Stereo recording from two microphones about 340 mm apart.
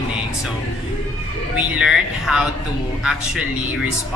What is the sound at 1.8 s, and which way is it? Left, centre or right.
Speech, centre.